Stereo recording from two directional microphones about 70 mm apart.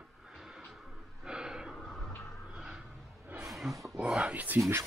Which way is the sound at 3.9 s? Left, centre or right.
Centre.